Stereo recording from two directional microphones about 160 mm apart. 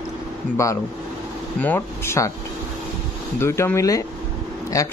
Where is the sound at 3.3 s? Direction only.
15° left (ahead or behind).